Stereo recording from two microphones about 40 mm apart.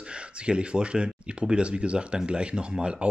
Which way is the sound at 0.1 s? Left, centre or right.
Right.